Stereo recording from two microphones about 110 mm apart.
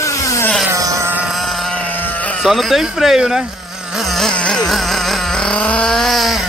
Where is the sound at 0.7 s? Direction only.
30° right (ahead or behind).